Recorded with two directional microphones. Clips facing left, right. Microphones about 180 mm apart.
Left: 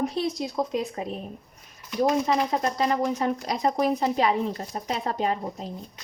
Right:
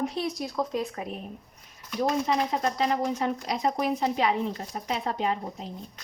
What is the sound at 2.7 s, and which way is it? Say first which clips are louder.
Speech: left 2 dB; 45° left (ahead or behind).